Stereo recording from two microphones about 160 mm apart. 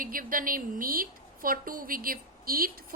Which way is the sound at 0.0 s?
60° right (ahead or behind).